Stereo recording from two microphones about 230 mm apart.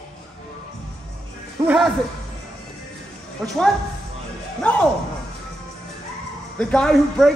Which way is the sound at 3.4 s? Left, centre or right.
Centre.